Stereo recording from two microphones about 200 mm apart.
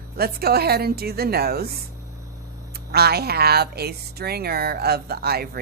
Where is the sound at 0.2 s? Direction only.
50° right (ahead or behind).